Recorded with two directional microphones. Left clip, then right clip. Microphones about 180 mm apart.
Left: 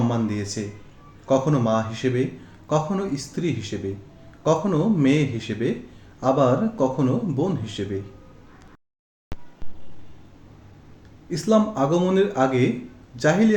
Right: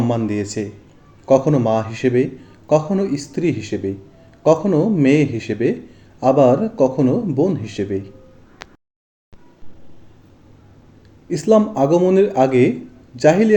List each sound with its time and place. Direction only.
0.1 s a man's voice: 25° right (ahead or behind)
11.3 s a man's voice: 25° right (ahead or behind)